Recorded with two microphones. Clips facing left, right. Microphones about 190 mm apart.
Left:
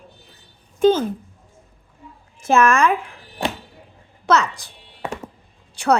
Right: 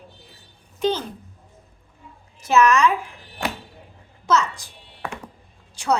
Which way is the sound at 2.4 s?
50° left (ahead or behind).